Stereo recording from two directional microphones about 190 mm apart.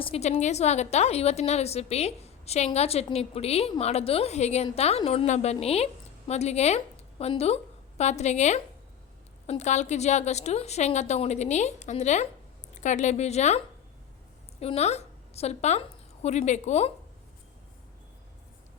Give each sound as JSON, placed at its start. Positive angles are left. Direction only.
{"t": 0.0, "sound": "a woman's voice", "side_deg": 35}
{"t": 14.6, "sound": "a woman's voice", "side_deg": 35}